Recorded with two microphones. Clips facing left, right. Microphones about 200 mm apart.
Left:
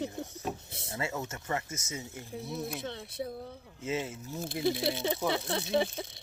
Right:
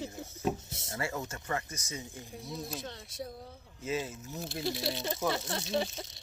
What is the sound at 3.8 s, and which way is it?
Speech, 25° left (ahead or behind).